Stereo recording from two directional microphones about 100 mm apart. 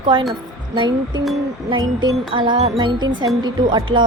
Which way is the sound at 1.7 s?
50° right (ahead or behind).